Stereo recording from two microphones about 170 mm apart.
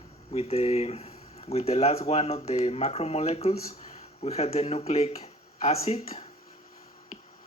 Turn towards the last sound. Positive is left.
turn(degrees=40)  # may be behind; listen again after turning